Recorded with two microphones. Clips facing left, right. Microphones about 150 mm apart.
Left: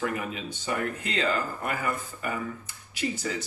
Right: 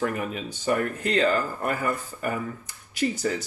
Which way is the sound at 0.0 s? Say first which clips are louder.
Right 3 dB; 45° right (ahead or behind).